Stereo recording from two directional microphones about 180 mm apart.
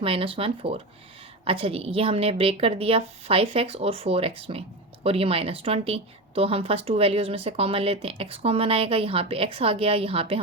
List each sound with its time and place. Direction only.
0.0 s a woman's voice: 30° right (ahead or behind)